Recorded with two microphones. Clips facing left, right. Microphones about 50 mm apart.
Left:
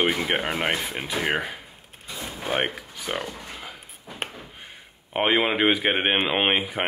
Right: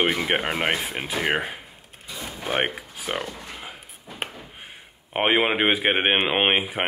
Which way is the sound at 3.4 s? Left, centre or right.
Centre.